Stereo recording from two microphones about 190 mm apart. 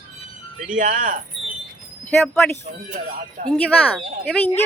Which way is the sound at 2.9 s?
45° right (ahead or behind).